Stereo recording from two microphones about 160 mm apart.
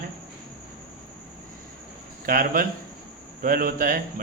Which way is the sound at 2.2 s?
65° right (ahead or behind).